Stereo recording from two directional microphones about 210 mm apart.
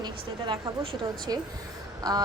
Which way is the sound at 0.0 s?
25° right (ahead or behind).